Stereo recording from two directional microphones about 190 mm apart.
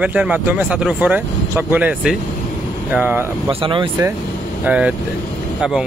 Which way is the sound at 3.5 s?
25° right (ahead or behind).